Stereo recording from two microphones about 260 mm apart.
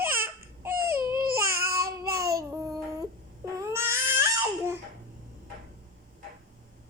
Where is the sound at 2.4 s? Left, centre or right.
Centre.